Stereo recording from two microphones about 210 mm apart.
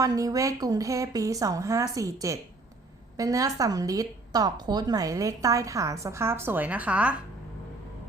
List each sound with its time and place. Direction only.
0.0 s a woman's voice: 15° right (ahead or behind)